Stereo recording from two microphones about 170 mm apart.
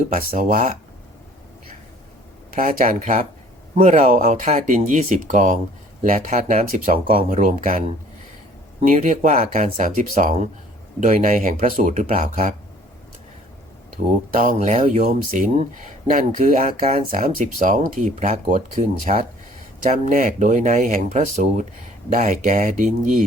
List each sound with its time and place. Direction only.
0.1 s speech: 55° right (ahead or behind)
2.6 s speech: 50° right (ahead or behind); by 7.3 s 35° right (ahead or behind)
7.3 s speech: 50° right (ahead or behind)
14.3 s speech: 50° right (ahead or behind)